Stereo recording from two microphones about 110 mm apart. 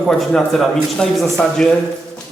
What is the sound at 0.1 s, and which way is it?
A man's voice, 5° left (ahead or behind).